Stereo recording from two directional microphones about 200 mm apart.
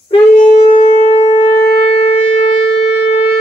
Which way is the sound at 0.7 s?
35° left (ahead or behind).